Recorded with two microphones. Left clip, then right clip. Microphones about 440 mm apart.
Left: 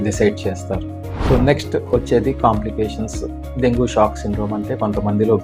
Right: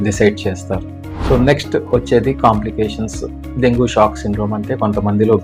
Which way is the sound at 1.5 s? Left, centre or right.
Left.